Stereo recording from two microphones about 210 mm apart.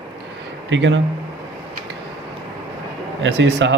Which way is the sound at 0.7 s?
60° right (ahead or behind).